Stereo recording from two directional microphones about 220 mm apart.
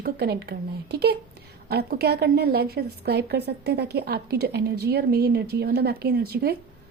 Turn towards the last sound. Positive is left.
turn(degrees=-45)  # may be behind; listen again after turning